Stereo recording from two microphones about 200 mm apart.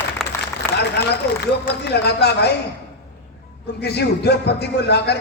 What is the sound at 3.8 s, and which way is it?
A man's voice, 55° left (ahead or behind).